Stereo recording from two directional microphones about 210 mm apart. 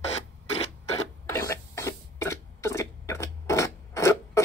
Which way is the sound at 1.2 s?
10° left (ahead or behind).